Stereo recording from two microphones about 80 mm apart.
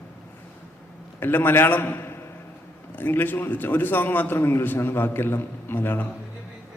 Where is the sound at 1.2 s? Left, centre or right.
Left.